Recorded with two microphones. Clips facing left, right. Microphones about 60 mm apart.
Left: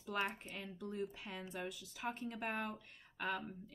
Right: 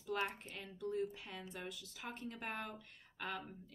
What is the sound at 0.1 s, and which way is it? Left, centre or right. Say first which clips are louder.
Speech: even; centre.